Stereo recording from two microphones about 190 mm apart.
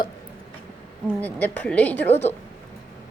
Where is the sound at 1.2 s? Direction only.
10° left (ahead or behind).